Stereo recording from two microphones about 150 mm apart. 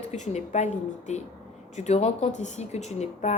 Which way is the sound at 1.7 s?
50° left (ahead or behind).